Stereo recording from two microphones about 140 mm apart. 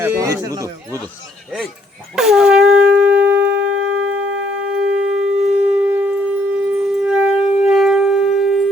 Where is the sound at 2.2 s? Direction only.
5° right (ahead or behind).